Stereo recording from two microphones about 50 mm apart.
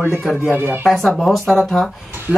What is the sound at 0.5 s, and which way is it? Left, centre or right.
Speech, right.